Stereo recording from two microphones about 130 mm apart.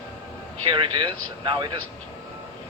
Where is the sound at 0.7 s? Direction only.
40° right (ahead or behind).